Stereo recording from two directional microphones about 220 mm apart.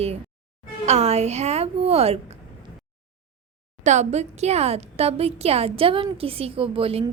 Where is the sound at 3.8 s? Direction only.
30° right (ahead or behind).